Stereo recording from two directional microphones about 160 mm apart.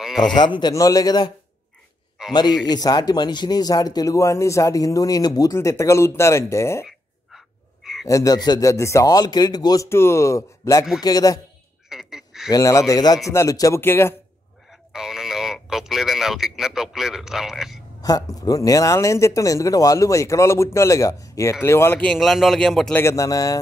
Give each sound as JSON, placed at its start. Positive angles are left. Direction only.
{"t": 0.2, "sound": "speech", "side_deg": 25}
{"t": 2.2, "sound": "a sound", "side_deg": -5}
{"t": 2.6, "sound": "speech", "side_deg": 25}
{"t": 6.9, "sound": "a sound", "side_deg": 0}
{"t": 8.1, "sound": "speech", "side_deg": 20}
{"t": 11.9, "sound": "quack", "side_deg": -5}
{"t": 12.4, "sound": "speech", "side_deg": 20}
{"t": 14.9, "sound": "speech", "side_deg": -5}
{"t": 18.0, "sound": "speech", "side_deg": 25}
{"t": 22.9, "sound": "speech", "side_deg": 20}